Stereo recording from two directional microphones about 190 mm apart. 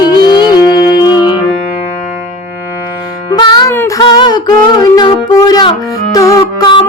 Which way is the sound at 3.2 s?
25° left (ahead or behind).